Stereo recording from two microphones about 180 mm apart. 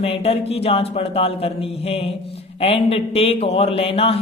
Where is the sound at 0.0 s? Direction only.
30° left (ahead or behind).